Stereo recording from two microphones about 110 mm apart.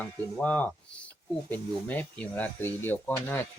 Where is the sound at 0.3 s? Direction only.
10° left (ahead or behind).